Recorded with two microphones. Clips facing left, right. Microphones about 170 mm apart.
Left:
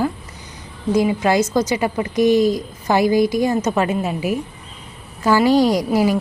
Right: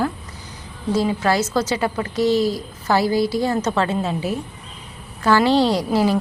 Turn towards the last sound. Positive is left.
turn(degrees=10)  # may be behind; listen again after turning